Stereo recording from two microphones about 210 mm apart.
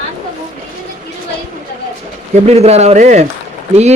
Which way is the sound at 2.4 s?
30° right (ahead or behind).